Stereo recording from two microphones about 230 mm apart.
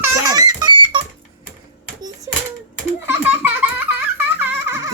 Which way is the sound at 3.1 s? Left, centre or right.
Centre.